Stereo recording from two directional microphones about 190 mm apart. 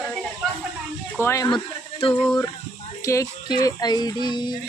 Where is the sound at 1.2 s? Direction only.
15° left (ahead or behind).